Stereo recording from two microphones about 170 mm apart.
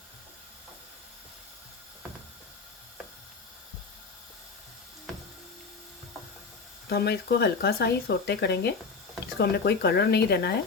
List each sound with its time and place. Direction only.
6.9 s speech: 75° left (ahead or behind)